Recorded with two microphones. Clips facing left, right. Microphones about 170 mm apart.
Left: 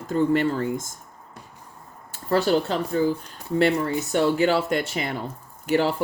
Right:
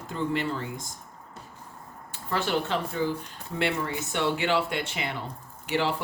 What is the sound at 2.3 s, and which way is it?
Speech, 40° left (ahead or behind).